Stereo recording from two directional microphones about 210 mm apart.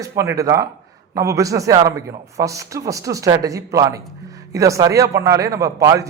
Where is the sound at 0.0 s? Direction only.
15° right (ahead or behind).